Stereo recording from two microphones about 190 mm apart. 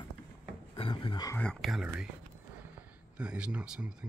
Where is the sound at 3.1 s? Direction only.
5° right (ahead or behind).